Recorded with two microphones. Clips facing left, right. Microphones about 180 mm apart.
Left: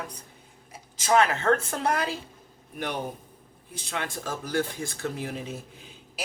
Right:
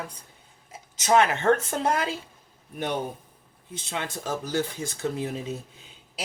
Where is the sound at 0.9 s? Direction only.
20° right (ahead or behind).